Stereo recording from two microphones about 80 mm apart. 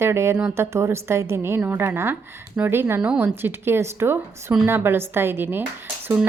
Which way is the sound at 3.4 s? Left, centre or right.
Right.